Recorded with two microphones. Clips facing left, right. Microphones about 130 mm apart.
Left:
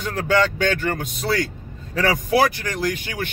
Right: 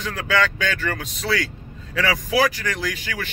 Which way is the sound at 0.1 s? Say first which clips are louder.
Left 3 dB; 45° left (ahead or behind).